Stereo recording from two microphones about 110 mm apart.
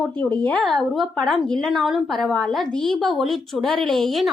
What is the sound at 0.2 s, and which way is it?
Speech, 15° left (ahead or behind).